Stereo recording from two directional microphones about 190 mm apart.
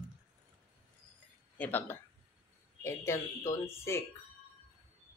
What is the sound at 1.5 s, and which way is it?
Speech, 10° left (ahead or behind).